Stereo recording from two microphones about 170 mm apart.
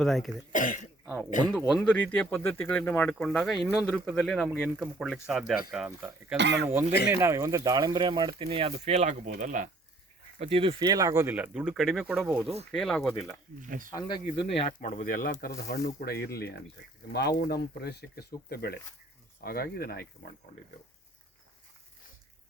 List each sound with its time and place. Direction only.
0.0 s speech: centre (ahead or behind)
0.5 s speech: 50° left (ahead or behind)
1.5 s speech: centre (ahead or behind)
6.3 s speech: 90° right
7.1 s speech: 15° right (ahead or behind); by 9.6 s 50° right (ahead or behind)
10.3 s speech: 35° right (ahead or behind); by 13.3 s centre (ahead or behind)
13.6 s speech: 50° right (ahead or behind)
13.9 s speech: 25° left (ahead or behind)
14.8 s speech: 50° left (ahead or behind); by 20.1 s 65° left (ahead or behind)